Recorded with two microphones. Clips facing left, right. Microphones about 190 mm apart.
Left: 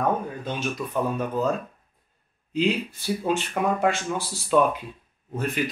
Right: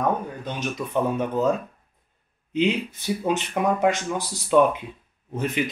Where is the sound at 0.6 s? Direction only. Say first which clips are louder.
Right 3 dB; 20° right (ahead or behind).